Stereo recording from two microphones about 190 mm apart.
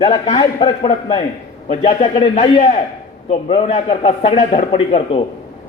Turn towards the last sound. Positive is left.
turn(degrees=30)  # may be behind; listen again after turning